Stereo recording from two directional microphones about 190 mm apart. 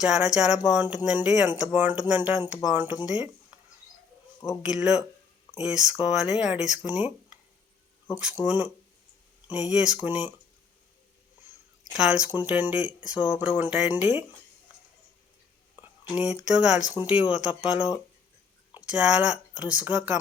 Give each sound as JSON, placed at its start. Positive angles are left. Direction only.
{"t": 0.0, "sound": "speech", "side_deg": -5}
{"t": 4.6, "sound": "speech", "side_deg": -5}
{"t": 11.9, "sound": "speech", "side_deg": -5}
{"t": 15.8, "sound": "speech", "side_deg": -5}